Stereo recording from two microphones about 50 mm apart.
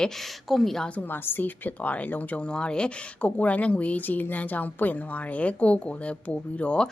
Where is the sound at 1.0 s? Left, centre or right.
Left.